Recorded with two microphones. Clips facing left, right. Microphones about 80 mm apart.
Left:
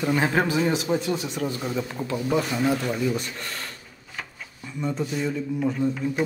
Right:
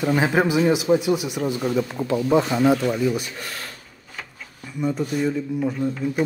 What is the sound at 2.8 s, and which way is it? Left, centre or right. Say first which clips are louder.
Speech: right 4 dB; centre.